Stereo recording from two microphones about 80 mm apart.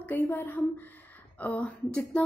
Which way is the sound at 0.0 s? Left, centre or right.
Left.